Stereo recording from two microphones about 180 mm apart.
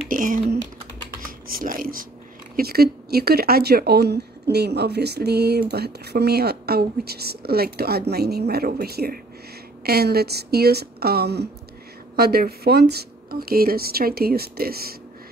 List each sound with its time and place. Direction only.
0.1 s typing: 50° right (ahead or behind)
2.5 s speech: 60° right (ahead or behind)